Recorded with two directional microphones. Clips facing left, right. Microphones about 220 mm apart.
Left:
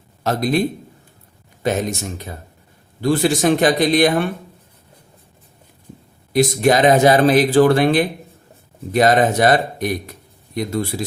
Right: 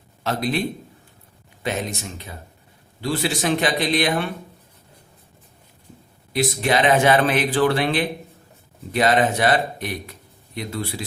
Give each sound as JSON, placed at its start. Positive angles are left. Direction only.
{"t": 0.2, "sound": "a man's voice", "side_deg": 45}
{"t": 1.6, "sound": "speech", "side_deg": 45}
{"t": 6.3, "sound": "speech", "side_deg": 45}